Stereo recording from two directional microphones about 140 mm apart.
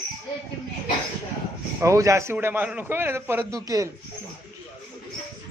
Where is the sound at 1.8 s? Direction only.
20° right (ahead or behind).